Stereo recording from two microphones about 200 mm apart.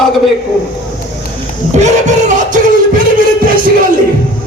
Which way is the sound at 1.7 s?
35° right (ahead or behind).